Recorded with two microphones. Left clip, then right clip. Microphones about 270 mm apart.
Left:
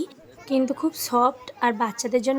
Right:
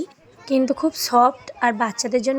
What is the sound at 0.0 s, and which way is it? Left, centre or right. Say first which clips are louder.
A woman's voice: right 1 dB; centre.